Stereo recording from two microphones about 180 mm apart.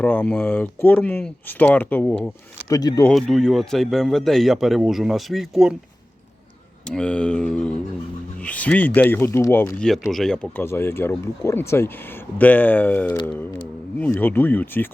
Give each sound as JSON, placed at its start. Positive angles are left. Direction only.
{"t": 0.0, "sound": "speech", "side_deg": 10}
{"t": 2.6, "sound": "speech", "side_deg": 20}
{"t": 3.1, "sound": "speech", "side_deg": 0}
{"t": 6.8, "sound": "speech", "side_deg": 5}